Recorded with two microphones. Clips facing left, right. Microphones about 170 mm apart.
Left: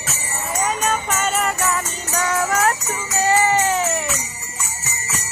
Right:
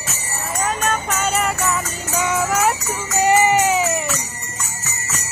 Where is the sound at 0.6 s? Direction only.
Centre (ahead or behind).